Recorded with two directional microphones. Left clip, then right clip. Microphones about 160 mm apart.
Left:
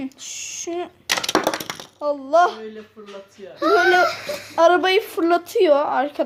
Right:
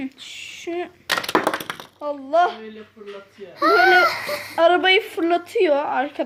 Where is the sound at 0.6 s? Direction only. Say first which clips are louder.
Right 1 dB; 5° left (ahead or behind); by 2.7 s 20° left (ahead or behind).